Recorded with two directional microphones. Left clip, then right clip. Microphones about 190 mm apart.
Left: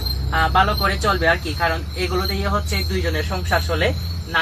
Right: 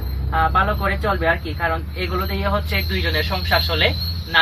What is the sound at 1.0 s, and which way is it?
Speech, 15° left (ahead or behind).